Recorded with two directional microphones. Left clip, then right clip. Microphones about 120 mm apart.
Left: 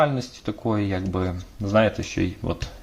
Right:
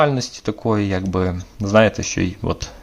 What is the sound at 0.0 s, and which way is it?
Speech, 30° right (ahead or behind).